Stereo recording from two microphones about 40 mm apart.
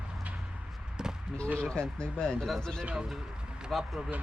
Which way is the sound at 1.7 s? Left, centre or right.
Left.